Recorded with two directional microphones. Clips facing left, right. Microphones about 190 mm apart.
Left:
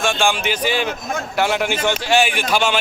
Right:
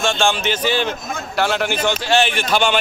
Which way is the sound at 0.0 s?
15° left (ahead or behind).